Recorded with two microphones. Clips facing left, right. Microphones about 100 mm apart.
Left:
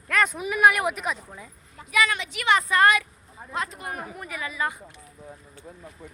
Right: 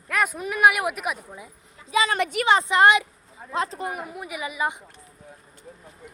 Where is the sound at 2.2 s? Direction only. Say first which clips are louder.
Right 11 dB; 50° right (ahead or behind).